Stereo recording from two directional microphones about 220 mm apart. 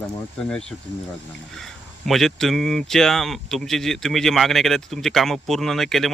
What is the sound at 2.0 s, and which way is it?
Speech, centre (ahead or behind).